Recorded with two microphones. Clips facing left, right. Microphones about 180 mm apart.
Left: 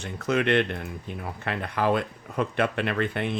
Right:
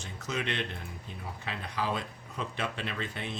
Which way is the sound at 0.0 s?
60° left (ahead or behind).